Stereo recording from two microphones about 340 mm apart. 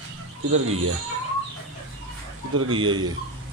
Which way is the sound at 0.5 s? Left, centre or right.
Right.